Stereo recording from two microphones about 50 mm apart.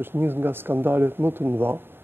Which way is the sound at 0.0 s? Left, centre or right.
Right.